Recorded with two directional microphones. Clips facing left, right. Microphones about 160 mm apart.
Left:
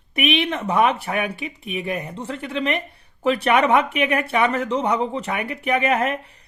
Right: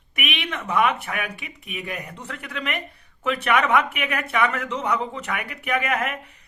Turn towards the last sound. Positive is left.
turn(degrees=30)  # may be behind; listen again after turning